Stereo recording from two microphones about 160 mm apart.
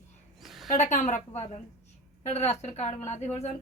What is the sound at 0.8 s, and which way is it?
A woman's voice, 45° left (ahead or behind).